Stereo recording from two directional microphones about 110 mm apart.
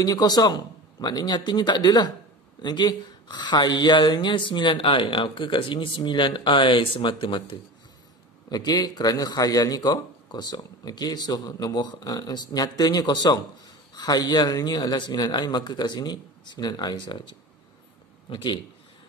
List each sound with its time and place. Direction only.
0.0 s speech: 35° left (ahead or behind)
8.5 s speech: 35° left (ahead or behind)
18.3 s speech: 45° left (ahead or behind)